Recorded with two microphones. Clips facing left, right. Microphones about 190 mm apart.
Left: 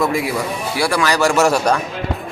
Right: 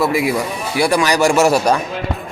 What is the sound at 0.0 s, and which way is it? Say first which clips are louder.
A man's voice: right 2 dB; 10° right (ahead or behind).